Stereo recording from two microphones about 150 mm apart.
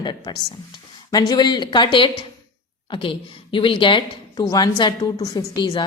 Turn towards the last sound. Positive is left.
turn(degrees=30)  # may be behind; listen again after turning